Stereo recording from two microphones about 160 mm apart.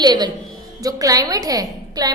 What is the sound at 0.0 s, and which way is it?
A woman's voice, 25° right (ahead or behind).